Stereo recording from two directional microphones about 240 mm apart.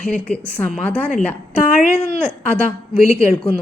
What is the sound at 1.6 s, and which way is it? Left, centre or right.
Speech, left.